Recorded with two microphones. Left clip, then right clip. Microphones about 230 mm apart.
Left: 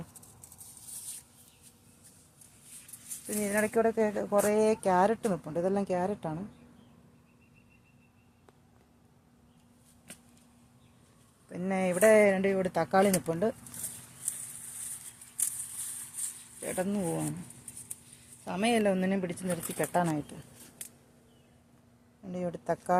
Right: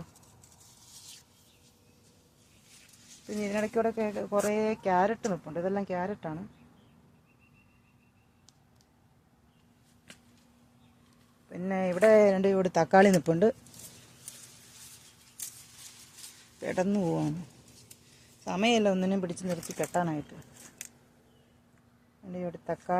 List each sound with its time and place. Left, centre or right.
3.2 s speech: centre
11.4 s speech: centre
12.2 s speech: centre
12.5 s speech: right
13.2 s speech: right
16.6 s speech: right
18.4 s speech: right
19.5 s speech: centre
22.3 s speech: centre